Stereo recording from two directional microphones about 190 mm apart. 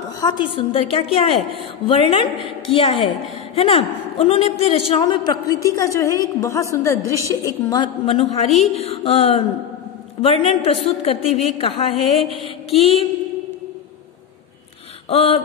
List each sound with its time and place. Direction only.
0.2 s a woman's voice: 25° left (ahead or behind)
8.7 s music: 30° left (ahead or behind)
11.5 s a woman's voice: 30° left (ahead or behind)
12.0 s a sound: centre (ahead or behind)
12.6 s music: 30° left (ahead or behind)
15.0 s music: 30° left (ahead or behind)